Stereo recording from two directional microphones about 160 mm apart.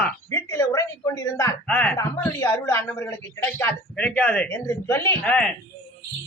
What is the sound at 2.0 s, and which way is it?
A woman's voice, 20° left (ahead or behind).